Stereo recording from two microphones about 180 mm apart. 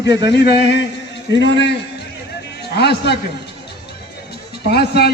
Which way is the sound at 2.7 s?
65° left (ahead or behind).